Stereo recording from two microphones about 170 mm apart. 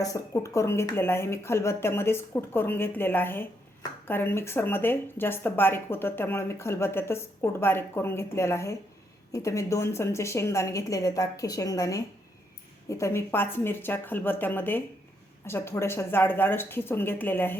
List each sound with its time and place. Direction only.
0.0 s speech: 20° left (ahead or behind)